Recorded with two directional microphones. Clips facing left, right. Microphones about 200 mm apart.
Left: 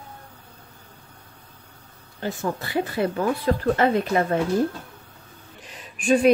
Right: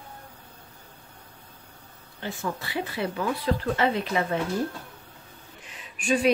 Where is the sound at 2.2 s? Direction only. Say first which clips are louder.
Left 5 dB; 45° left (ahead or behind).